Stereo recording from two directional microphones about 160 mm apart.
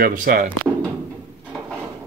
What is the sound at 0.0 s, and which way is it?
Speech, 60° right (ahead or behind).